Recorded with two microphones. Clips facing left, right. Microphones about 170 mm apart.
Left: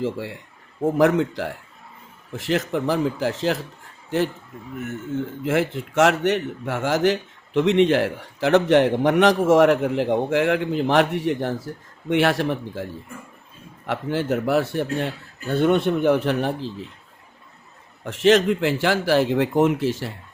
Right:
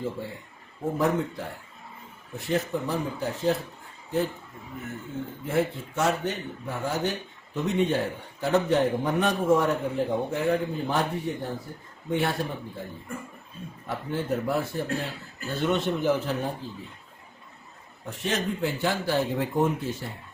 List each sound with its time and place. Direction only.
0.0 s speech: 90° left
5.4 s speech: 90° left
13.8 s a man's voice: 90° left
18.0 s speech: 90° left